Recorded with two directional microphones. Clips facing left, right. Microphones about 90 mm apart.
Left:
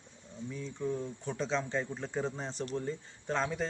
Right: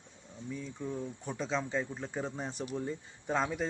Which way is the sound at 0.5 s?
Centre (ahead or behind).